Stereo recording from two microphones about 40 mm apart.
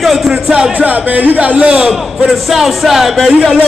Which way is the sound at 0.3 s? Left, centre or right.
Right.